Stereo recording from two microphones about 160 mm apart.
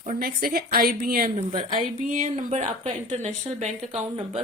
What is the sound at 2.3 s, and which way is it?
A woman's voice, 45° right (ahead or behind).